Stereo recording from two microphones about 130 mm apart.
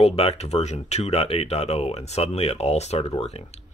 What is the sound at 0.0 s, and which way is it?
Speech, 50° left (ahead or behind).